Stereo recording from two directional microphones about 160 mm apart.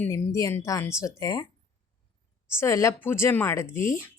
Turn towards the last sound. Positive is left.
turn(degrees=15)  # may be behind; listen again after turning